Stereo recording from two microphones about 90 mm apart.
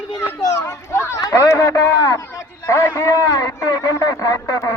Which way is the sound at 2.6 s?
30° left (ahead or behind).